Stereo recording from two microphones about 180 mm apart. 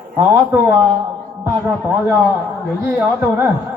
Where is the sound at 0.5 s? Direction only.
10° right (ahead or behind).